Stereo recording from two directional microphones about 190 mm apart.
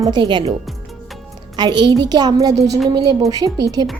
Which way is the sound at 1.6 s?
25° right (ahead or behind).